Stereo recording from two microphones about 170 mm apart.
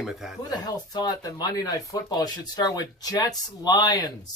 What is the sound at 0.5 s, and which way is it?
Speech, 25° left (ahead or behind).